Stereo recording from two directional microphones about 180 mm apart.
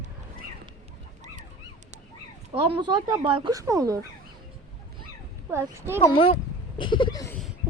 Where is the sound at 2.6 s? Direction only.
30° right (ahead or behind).